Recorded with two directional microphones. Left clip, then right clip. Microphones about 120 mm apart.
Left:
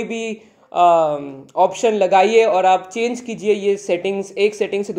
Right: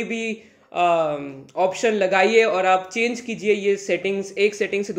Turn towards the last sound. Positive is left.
turn(degrees=20)  # may be behind; listen again after turning